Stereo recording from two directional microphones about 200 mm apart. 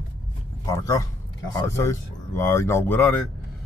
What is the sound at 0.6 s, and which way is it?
Speech, 15° left (ahead or behind).